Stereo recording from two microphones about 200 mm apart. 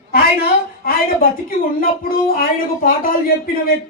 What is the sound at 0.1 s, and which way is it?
A woman's voice, 50° left (ahead or behind).